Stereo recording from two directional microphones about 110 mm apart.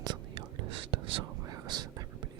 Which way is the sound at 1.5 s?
40° right (ahead or behind).